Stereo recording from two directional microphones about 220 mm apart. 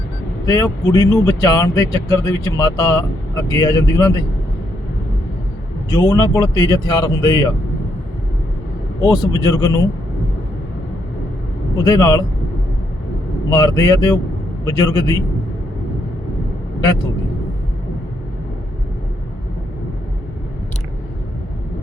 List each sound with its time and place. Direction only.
0.4 s speech: 15° left (ahead or behind)
5.9 s speech: 15° left (ahead or behind)
9.0 s speech: 15° left (ahead or behind)
11.8 s speech: 15° left (ahead or behind)
13.5 s speech: 15° left (ahead or behind)